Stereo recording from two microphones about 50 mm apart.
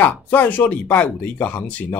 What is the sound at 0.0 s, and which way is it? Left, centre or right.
Speech, left.